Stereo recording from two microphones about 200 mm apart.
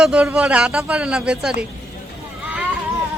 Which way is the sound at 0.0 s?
5° right (ahead or behind).